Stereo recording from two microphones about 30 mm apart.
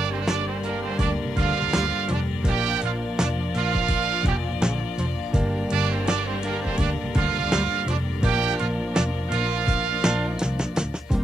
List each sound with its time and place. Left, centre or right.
1.4 s music: right
5.7 s music: right